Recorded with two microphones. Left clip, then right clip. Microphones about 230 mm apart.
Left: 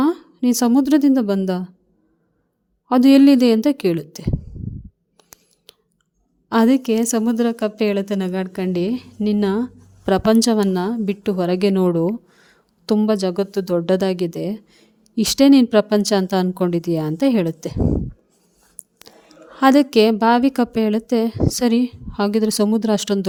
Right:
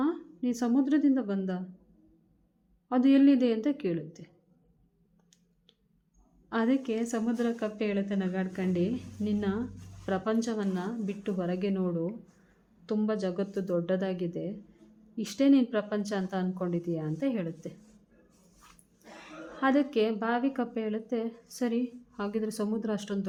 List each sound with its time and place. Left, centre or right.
0.0 s a woman's voice: left
2.9 s a woman's voice: left
6.5 s a woman's voice: left
19.5 s a woman's voice: left